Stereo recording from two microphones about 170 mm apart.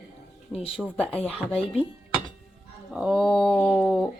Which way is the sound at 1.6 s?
35° left (ahead or behind).